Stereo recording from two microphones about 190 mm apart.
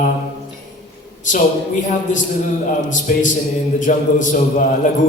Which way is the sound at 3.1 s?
45° left (ahead or behind).